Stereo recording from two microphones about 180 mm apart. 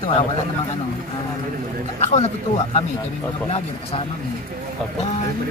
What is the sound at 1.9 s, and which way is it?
Speech, 35° left (ahead or behind).